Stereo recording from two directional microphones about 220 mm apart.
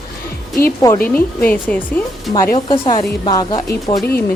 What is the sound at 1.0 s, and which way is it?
Speech, 10° left (ahead or behind).